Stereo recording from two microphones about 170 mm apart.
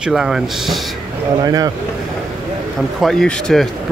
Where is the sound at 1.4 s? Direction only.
20° right (ahead or behind).